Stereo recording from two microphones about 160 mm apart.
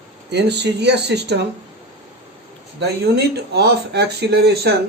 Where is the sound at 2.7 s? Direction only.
90° right.